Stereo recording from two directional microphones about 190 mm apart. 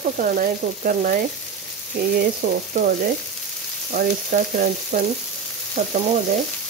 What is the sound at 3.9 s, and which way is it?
Frying, 45° right (ahead or behind).